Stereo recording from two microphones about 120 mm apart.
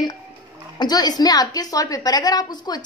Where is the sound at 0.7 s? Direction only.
35° left (ahead or behind).